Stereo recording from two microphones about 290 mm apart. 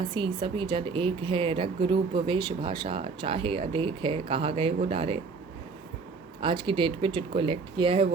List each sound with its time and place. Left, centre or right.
0.1 s speech: centre
6.4 s speech: centre